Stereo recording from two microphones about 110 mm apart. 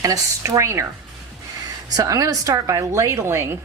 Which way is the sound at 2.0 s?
30° right (ahead or behind).